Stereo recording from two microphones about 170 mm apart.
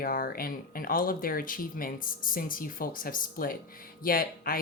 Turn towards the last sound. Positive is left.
turn(degrees=60)  # may be behind; listen again after turning